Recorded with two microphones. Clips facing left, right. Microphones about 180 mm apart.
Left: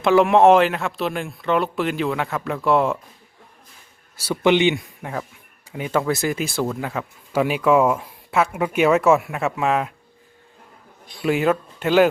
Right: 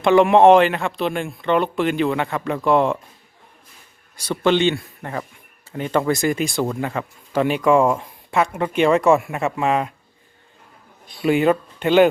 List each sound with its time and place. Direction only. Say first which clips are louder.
0.0 s speech: right 2 dB; centre (ahead or behind)
4.2 s a man's voice: left 1 dB; 10° left (ahead or behind)
11.2 s speech: right 3 dB; centre (ahead or behind)